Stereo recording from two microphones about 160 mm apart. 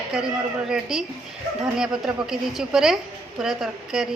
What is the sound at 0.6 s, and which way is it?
A woman's voice, 5° right (ahead or behind).